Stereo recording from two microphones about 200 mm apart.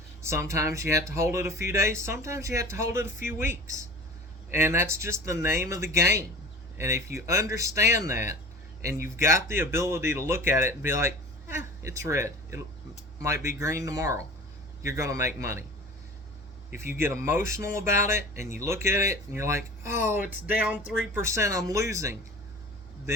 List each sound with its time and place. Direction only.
0.2 s speech: 15° right (ahead or behind)
17.0 s speech: 10° right (ahead or behind)